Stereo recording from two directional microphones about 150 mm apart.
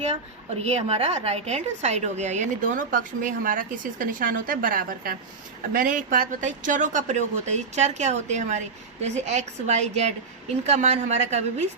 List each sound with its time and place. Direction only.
0.1 s a woman's voice: 45° right (ahead or behind)